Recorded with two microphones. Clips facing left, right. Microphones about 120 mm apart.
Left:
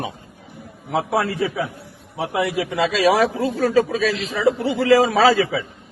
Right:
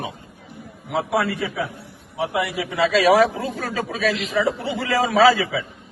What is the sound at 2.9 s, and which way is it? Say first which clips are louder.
A man's voice: right 2 dB; 25° left (ahead or behind).